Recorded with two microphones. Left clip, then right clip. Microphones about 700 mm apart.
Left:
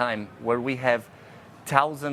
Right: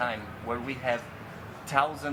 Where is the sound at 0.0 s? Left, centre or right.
Left.